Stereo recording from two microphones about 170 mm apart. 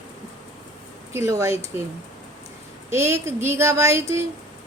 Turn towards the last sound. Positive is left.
turn(degrees=-15)  # may be behind; listen again after turning